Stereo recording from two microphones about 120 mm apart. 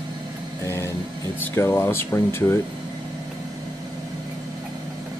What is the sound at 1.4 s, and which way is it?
Speech, 20° left (ahead or behind).